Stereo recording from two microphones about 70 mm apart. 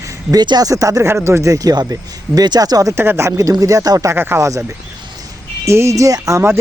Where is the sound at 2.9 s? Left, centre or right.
Right.